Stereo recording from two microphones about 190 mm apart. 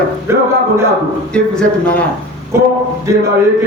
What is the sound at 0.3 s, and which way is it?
Speech, 15° right (ahead or behind).